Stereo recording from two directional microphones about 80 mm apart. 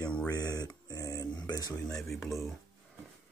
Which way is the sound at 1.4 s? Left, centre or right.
Left.